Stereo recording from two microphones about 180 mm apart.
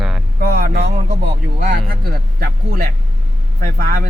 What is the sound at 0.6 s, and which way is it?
Speech, 50° right (ahead or behind).